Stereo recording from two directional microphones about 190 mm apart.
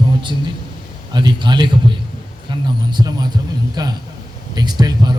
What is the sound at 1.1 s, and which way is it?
A man's voice, 25° right (ahead or behind).